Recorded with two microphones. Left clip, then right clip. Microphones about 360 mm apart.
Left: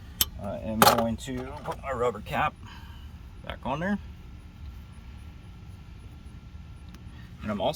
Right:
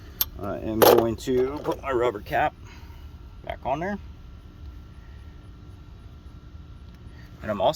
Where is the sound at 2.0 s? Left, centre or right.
Centre.